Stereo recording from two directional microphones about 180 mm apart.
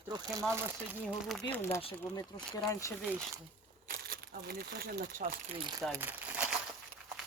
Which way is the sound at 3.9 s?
55° right (ahead or behind).